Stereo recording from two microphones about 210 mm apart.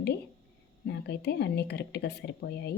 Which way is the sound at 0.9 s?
55° left (ahead or behind).